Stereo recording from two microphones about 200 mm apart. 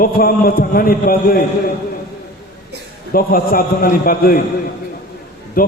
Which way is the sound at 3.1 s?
45° left (ahead or behind).